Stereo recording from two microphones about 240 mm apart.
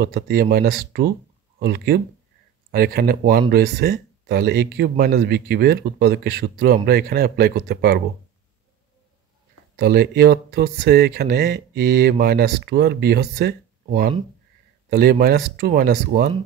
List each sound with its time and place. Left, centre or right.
0.0 s speech: right
9.8 s speech: right